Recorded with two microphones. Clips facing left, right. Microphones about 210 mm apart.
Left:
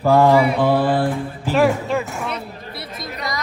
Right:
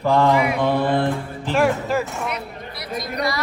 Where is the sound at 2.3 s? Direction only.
25° left (ahead or behind).